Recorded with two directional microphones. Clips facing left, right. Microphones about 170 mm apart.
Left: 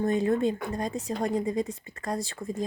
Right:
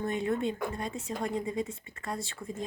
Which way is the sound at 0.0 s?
35° left (ahead or behind).